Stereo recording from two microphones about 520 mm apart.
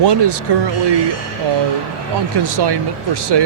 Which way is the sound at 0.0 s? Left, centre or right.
Right.